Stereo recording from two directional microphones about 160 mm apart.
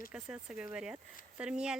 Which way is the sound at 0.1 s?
5° right (ahead or behind).